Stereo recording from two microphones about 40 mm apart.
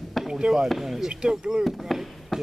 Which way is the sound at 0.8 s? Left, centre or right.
Centre.